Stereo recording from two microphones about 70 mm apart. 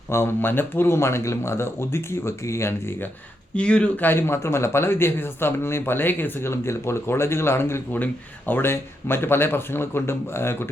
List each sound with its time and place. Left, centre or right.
0.1 s speech: left
3.5 s speech: centre; by 7.8 s left
7.9 s speech: left